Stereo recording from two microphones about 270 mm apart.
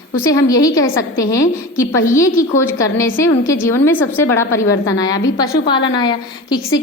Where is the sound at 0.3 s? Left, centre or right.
Centre.